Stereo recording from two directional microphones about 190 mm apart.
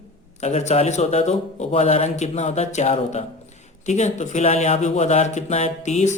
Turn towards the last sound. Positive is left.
turn(degrees=40)  # may be behind; listen again after turning